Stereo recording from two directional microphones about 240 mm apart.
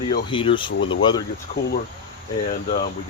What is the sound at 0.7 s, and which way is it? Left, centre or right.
Speech, left.